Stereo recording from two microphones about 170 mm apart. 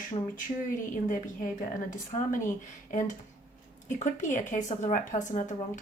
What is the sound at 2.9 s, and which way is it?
A woman's voice, 50° left (ahead or behind).